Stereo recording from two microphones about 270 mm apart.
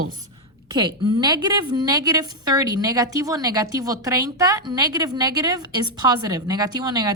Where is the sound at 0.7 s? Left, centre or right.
Centre.